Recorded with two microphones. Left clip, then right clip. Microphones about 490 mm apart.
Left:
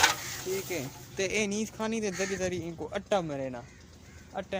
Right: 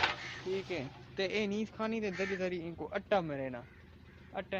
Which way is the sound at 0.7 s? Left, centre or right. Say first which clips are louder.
Left 4 dB; right.